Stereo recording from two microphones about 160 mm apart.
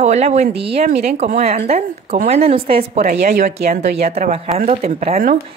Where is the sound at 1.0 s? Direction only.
45° right (ahead or behind).